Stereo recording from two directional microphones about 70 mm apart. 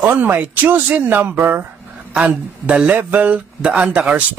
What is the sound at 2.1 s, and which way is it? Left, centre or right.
Speech, centre.